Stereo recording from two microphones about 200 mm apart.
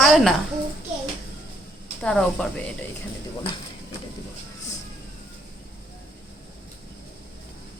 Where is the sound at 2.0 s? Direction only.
5° left (ahead or behind).